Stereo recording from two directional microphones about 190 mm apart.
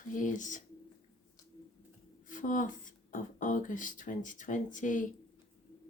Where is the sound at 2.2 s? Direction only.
45° left (ahead or behind).